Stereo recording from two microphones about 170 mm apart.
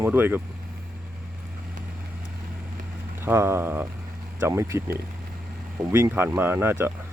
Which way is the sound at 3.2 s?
15° right (ahead or behind).